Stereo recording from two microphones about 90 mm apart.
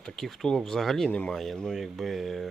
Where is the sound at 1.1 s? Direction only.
15° left (ahead or behind).